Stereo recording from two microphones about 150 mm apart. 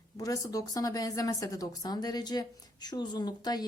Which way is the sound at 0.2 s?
25° left (ahead or behind).